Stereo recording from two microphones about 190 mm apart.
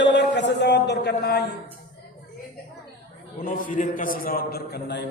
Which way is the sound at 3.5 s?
45° left (ahead or behind).